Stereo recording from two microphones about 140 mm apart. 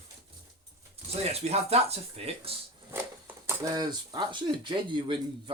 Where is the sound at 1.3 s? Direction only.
45° right (ahead or behind).